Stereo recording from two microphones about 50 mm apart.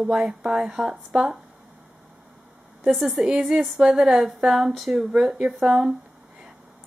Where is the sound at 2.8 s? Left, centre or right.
Centre.